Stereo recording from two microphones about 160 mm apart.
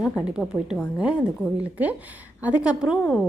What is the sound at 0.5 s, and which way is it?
Speech, 5° left (ahead or behind).